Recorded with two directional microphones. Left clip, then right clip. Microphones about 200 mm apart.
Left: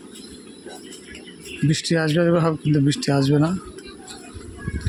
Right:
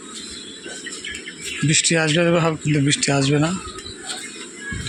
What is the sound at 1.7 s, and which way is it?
A man's voice, 20° left (ahead or behind).